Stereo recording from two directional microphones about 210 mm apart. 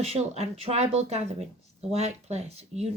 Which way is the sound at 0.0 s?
30° right (ahead or behind).